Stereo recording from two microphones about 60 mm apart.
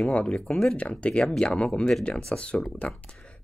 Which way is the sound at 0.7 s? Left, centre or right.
Left.